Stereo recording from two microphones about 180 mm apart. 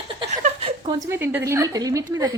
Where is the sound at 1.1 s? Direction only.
15° right (ahead or behind).